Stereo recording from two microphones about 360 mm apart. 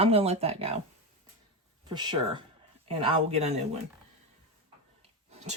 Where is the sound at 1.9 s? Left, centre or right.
Centre.